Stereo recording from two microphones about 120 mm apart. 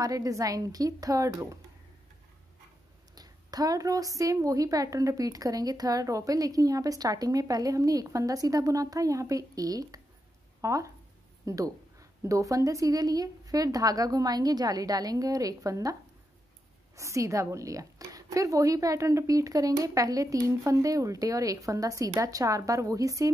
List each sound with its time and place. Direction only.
0.0 s a woman's voice: 30° right (ahead or behind)
3.2 s a woman's voice: 35° right (ahead or behind)